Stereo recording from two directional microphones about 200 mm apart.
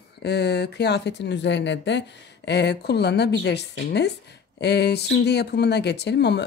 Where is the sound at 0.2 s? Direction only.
55° left (ahead or behind).